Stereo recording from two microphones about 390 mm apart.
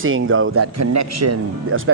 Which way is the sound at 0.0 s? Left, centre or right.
Right.